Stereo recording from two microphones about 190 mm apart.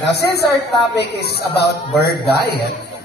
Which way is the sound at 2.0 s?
55° left (ahead or behind).